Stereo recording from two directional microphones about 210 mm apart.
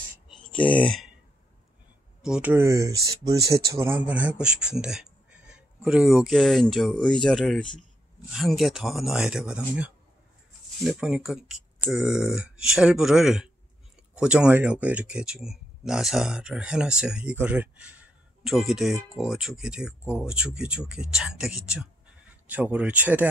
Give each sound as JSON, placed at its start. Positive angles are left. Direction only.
{"t": 0.6, "sound": "speech", "side_deg": 5}
{"t": 2.2, "sound": "speech", "side_deg": -5}